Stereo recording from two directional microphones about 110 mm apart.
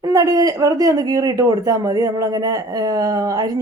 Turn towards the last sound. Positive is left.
turn(degrees=-35)  # may be behind; listen again after turning